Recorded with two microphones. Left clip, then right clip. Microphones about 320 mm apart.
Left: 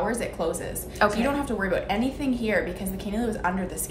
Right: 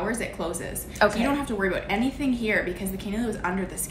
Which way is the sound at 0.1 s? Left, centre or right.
Centre.